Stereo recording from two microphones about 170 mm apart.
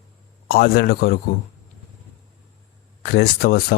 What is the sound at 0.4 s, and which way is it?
Speech, 65° left (ahead or behind).